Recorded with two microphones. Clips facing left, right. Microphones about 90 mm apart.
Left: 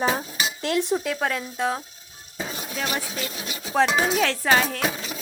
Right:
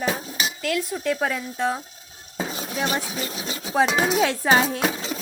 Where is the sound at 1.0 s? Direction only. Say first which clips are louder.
Right 2 dB; centre (ahead or behind).